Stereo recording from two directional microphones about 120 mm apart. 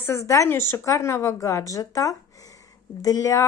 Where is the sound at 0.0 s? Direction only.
25° left (ahead or behind).